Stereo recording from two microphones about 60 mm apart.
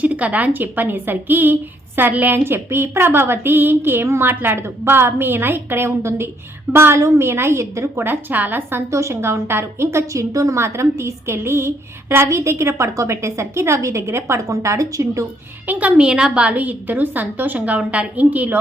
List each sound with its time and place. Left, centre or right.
0.0 s a woman's voice: right
8.0 s a woman's voice: right
8.9 s a woman's voice: right
12.3 s a woman's voice: right
15.6 s a woman's voice: right
15.9 s a woman's voice: centre
16.6 s a woman's voice: right